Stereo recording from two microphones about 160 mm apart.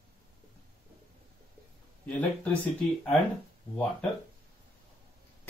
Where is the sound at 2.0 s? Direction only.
10° left (ahead or behind).